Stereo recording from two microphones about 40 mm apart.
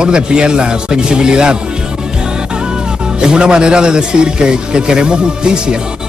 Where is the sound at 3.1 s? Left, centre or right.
Right.